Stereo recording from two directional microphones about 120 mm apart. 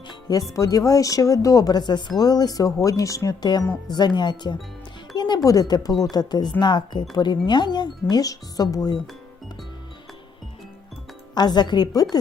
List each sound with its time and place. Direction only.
0.1 s music: 30° left (ahead or behind)
0.5 s speech: 30° left (ahead or behind)
5.1 s music: 35° left (ahead or behind)
5.5 s speech: 35° left (ahead or behind)
11.3 s speech: 35° left (ahead or behind)